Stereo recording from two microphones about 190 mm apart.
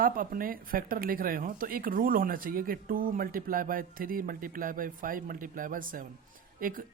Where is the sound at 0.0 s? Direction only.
50° right (ahead or behind).